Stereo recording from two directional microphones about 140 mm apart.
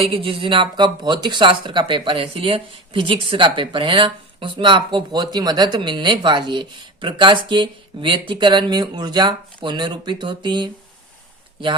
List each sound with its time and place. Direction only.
0.0 s speech: 40° right (ahead or behind)